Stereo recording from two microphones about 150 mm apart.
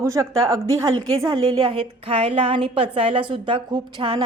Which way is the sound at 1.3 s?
35° right (ahead or behind).